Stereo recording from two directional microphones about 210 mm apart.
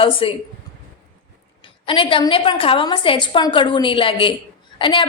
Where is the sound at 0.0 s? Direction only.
25° left (ahead or behind).